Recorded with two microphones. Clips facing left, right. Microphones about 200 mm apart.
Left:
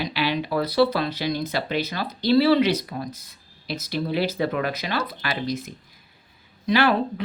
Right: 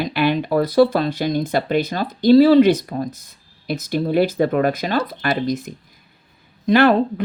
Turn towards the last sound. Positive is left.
turn(degrees=-50)  # may be behind; listen again after turning